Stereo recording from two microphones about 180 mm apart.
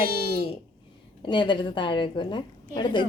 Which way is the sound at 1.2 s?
25° left (ahead or behind).